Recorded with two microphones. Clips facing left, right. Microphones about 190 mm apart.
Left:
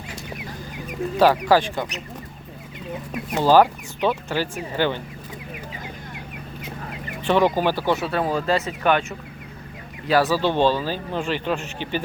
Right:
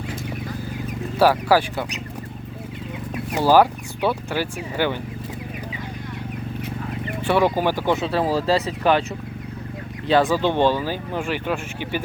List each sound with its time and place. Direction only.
1.2 s speech: 10° right (ahead or behind)
3.3 s speech: 10° right (ahead or behind)
7.3 s speech: 10° right (ahead or behind)
8.3 s speech: 30° right (ahead or behind)
10.1 s speech: 20° right (ahead or behind)